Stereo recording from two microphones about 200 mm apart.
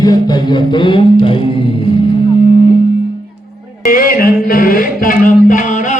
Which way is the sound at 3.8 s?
45° left (ahead or behind).